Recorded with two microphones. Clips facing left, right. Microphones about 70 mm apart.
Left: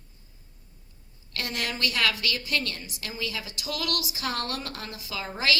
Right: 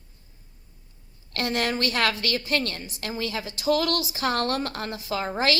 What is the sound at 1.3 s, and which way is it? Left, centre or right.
A woman's voice, right.